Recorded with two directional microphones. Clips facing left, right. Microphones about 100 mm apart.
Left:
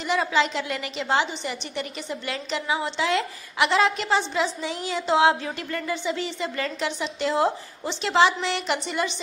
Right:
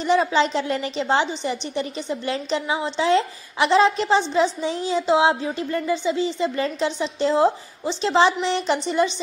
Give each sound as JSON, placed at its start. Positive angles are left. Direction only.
{"t": 0.0, "sound": "a woman's voice", "side_deg": -30}